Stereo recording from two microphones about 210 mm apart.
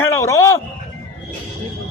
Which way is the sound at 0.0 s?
15° left (ahead or behind).